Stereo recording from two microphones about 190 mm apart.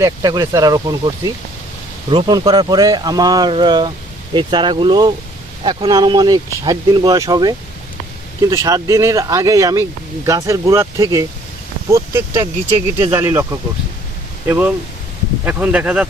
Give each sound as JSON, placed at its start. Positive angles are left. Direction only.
{"t": 0.0, "sound": "speech", "side_deg": -20}